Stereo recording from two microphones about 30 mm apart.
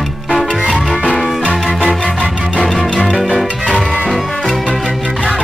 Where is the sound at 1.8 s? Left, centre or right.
Left.